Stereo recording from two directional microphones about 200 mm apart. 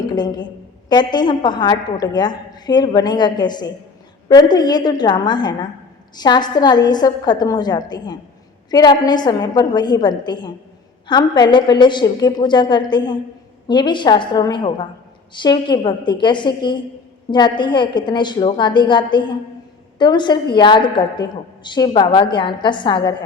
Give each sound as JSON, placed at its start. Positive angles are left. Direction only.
{"t": 0.1, "sound": "a woman's voice", "side_deg": 20}